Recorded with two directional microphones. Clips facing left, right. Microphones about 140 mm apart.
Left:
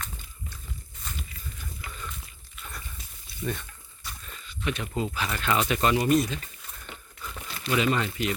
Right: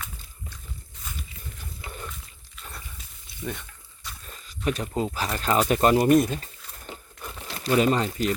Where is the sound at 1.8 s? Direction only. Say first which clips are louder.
Right 5 dB; 25° right (ahead or behind).